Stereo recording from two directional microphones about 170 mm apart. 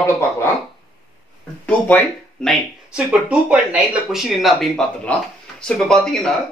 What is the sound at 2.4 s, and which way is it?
Speech, 5° right (ahead or behind).